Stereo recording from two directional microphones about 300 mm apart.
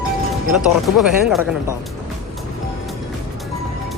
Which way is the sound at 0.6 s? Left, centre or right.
Centre.